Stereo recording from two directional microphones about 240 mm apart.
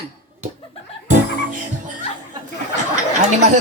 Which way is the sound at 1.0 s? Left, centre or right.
Right.